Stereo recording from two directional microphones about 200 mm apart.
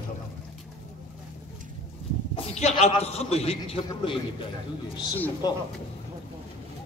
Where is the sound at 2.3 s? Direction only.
30° left (ahead or behind).